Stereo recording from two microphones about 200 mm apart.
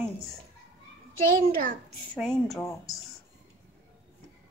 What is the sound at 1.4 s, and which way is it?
Speech, 40° right (ahead or behind).